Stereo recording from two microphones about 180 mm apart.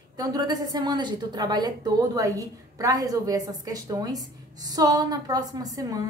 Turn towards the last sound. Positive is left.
turn(degrees=-20)  # may be behind; listen again after turning